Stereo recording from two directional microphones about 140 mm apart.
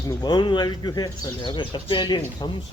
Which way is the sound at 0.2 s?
30° left (ahead or behind).